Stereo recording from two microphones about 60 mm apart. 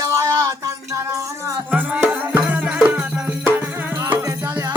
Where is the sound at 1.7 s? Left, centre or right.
Right.